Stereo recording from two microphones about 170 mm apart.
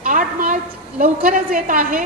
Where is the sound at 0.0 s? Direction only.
55° right (ahead or behind).